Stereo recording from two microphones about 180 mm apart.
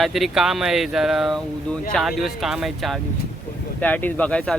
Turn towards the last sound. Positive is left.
turn(degrees=5)  # may be behind; listen again after turning